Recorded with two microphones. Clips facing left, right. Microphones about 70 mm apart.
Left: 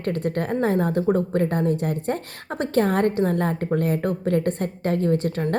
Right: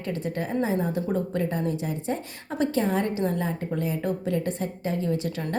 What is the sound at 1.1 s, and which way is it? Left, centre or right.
A woman's voice, left.